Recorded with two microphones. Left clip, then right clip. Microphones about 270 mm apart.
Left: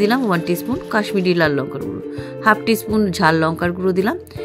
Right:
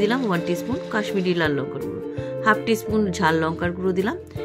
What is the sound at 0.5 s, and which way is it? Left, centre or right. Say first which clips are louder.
Speech: left 4 dB; left.